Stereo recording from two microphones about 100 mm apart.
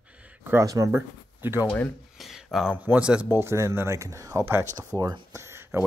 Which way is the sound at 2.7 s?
15° right (ahead or behind).